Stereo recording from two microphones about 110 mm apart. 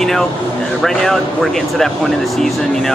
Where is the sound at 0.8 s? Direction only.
5° left (ahead or behind).